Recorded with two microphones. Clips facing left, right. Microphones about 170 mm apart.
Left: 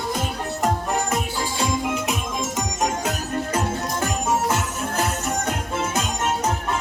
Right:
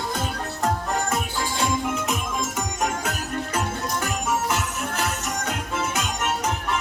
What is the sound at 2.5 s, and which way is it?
Music, 20° left (ahead or behind).